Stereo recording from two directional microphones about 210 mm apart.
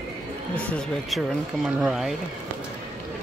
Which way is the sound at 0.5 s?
Centre (ahead or behind).